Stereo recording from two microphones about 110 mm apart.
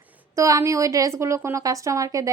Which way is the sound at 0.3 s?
30° right (ahead or behind).